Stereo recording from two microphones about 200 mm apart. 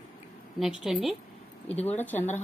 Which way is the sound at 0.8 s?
5° right (ahead or behind).